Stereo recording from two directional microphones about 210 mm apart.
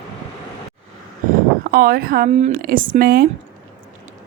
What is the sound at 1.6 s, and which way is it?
A woman's voice, 45° right (ahead or behind).